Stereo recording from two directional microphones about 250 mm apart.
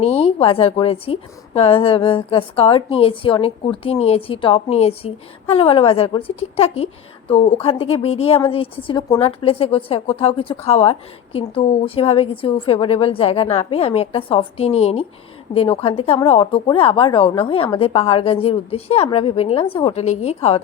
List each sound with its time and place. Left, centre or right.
0.0 s a woman's voice: left